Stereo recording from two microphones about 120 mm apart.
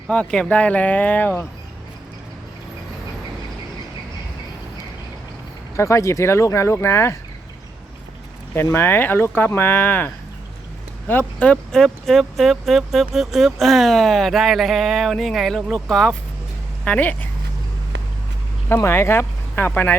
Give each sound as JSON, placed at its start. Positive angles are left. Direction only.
{"t": 0.1, "sound": "speech", "side_deg": 10}
{"t": 5.7, "sound": "speech", "side_deg": 25}
{"t": 8.5, "sound": "speech", "side_deg": 20}
{"t": 11.1, "sound": "speech", "side_deg": 15}
{"t": 11.7, "sound": "speech", "side_deg": 0}
{"t": 18.7, "sound": "speech", "side_deg": 20}